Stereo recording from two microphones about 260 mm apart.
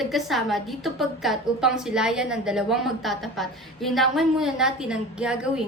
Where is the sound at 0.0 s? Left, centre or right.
Centre.